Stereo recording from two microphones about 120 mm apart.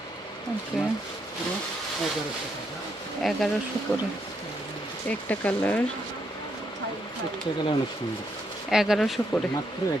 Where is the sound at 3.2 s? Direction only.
5° left (ahead or behind).